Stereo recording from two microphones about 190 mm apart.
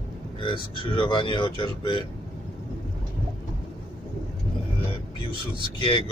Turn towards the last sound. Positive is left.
turn(degrees=25)  # may be behind; listen again after turning